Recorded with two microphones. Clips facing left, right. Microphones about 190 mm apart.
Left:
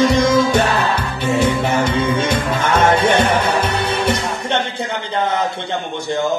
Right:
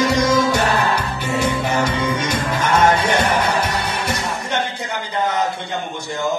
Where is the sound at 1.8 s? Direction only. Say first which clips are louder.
Left 3 dB; 25° left (ahead or behind).